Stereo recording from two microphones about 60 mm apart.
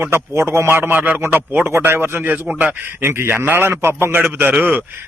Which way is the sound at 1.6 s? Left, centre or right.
Right.